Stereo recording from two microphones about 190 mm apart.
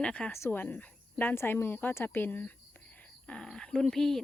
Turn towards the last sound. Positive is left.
turn(degrees=0)  # may be behind; listen again after turning